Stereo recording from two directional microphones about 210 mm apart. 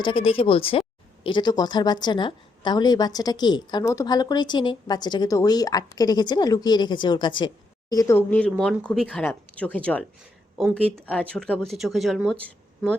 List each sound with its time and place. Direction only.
0.0 s speech: 25° left (ahead or behind); by 12.4 s centre (ahead or behind)